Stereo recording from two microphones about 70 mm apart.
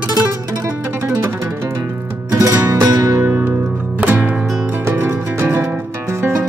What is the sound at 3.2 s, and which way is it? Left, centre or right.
Music, right.